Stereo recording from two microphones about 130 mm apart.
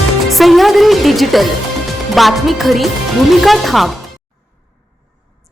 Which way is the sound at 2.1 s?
Centre (ahead or behind).